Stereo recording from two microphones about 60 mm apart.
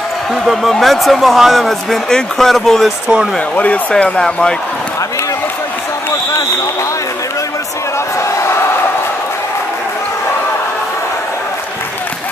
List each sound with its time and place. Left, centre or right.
0.3 s a man's voice: centre
3.5 s speech: left